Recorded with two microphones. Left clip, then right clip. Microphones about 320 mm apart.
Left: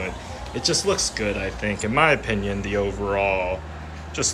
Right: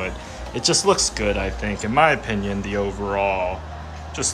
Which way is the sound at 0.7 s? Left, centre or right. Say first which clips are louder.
Right 4 dB; centre.